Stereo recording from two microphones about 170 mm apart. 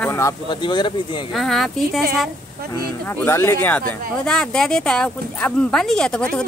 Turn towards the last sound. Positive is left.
turn(degrees=5)  # may be behind; listen again after turning